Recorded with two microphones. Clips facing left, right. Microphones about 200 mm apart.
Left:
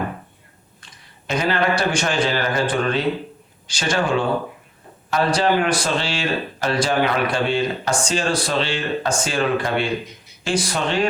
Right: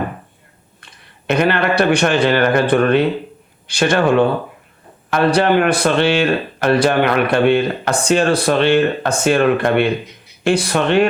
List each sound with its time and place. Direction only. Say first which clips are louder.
0.8 s a man's voice: right 3 dB; 60° right (ahead or behind)